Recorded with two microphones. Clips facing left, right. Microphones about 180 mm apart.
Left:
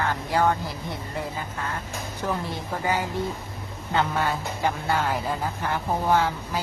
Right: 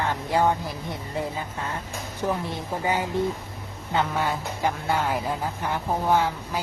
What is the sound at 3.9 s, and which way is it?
Speech, 5° right (ahead or behind).